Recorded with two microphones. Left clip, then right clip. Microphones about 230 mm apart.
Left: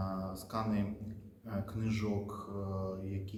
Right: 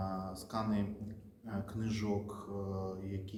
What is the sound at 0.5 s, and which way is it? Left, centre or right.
Speech, centre.